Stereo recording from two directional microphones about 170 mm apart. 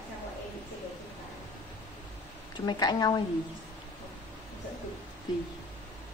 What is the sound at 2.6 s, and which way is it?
Speech, 25° left (ahead or behind).